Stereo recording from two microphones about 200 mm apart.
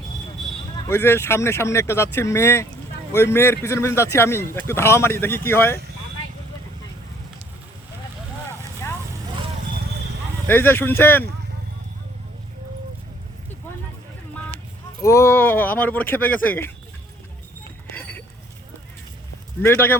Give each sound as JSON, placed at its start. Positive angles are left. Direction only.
{"t": 0.9, "sound": "a man's voice", "side_deg": 10}
{"t": 10.4, "sound": "a man's voice", "side_deg": 10}
{"t": 15.0, "sound": "a man's voice", "side_deg": 15}
{"t": 19.6, "sound": "a man's voice", "side_deg": 10}